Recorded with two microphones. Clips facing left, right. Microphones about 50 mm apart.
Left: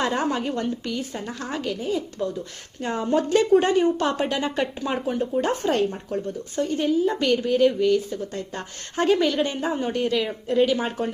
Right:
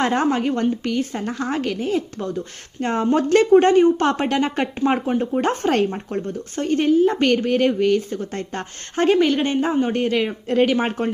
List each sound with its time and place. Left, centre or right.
0.0 s speech: right
4.9 s speech: right
5.4 s a woman's voice: right